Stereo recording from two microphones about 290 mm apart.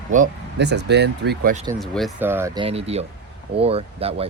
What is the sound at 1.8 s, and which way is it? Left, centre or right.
Speech, centre.